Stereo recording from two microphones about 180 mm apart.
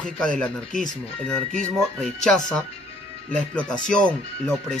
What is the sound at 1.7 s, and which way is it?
Speech, 5° left (ahead or behind).